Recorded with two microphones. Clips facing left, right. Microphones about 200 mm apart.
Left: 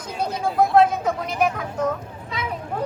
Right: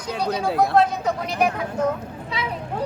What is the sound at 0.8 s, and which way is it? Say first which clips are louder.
Speech: left 2 dB; 50° left (ahead or behind).